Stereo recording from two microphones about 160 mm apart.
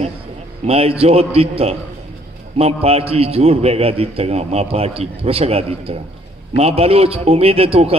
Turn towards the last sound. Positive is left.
turn(degrees=-35)  # may be behind; listen again after turning